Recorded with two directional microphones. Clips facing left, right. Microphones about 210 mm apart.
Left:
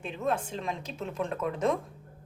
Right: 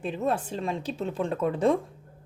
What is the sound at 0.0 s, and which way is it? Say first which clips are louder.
Speech: right 3 dB; 35° right (ahead or behind).